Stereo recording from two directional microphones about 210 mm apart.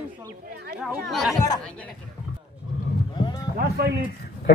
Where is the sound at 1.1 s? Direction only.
Centre (ahead or behind).